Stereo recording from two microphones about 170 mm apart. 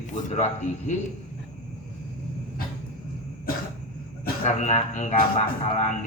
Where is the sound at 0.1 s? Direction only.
45° left (ahead or behind).